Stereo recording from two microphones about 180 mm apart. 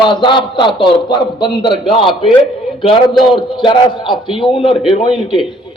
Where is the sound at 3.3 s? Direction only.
25° left (ahead or behind).